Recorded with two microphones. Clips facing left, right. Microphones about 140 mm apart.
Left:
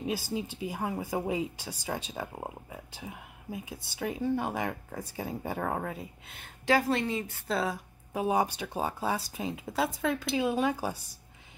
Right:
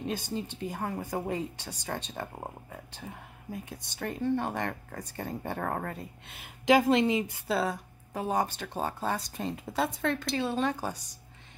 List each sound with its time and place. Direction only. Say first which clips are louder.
0.0 s speech: left 1 dB; 5° left (ahead or behind)
6.6 s a woman's voice: right 4 dB; 20° right (ahead or behind)
7.4 s speech: right 1 dB; centre (ahead or behind)